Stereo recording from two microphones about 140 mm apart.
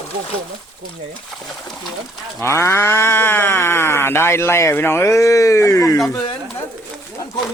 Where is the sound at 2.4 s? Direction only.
20° left (ahead or behind).